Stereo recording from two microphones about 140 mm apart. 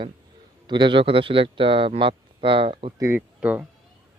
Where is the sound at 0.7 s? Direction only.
35° right (ahead or behind).